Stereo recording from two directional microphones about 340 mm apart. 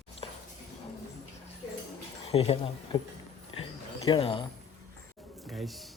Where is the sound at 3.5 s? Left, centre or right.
Centre.